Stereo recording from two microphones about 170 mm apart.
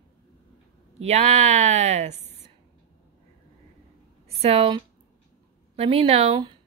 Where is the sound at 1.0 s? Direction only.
40° right (ahead or behind).